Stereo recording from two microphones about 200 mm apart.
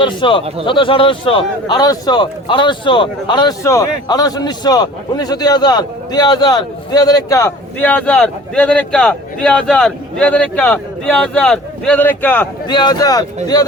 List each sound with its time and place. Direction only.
0.0 s speech: 25° left (ahead or behind)
12.6 s speech: 20° left (ahead or behind)